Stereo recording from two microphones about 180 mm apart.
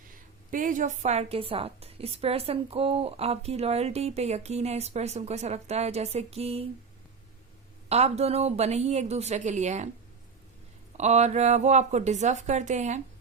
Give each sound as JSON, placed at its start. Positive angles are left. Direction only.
{"t": 0.5, "sound": "a woman's voice", "side_deg": -45}
{"t": 7.9, "sound": "a woman's voice", "side_deg": -35}
{"t": 10.9, "sound": "a woman's voice", "side_deg": -40}